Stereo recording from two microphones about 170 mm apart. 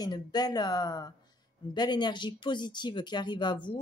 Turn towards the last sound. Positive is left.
turn(degrees=30)  # may be behind; listen again after turning